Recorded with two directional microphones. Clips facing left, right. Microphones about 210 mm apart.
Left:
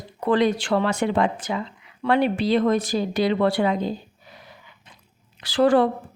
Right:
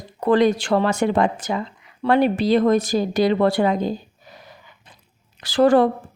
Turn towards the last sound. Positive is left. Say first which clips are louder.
# right 3 dB
turn(degrees=-45)  # may be behind; listen again after turning